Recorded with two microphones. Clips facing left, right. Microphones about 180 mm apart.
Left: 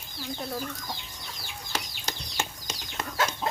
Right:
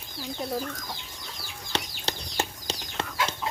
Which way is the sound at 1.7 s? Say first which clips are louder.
Right 4 dB; 35° right (ahead or behind).